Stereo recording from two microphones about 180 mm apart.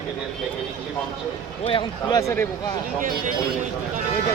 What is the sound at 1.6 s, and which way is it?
Speech, 25° left (ahead or behind).